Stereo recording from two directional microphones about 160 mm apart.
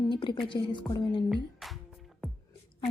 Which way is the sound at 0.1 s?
30° left (ahead or behind).